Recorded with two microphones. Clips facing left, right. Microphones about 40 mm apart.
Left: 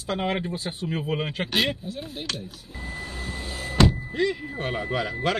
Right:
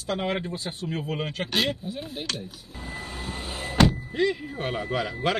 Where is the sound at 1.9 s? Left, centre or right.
Centre.